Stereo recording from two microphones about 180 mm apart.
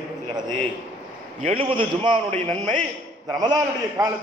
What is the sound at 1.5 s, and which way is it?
Speech, 30° right (ahead or behind).